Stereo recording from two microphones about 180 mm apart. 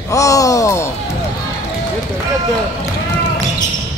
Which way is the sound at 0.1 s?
20° left (ahead or behind).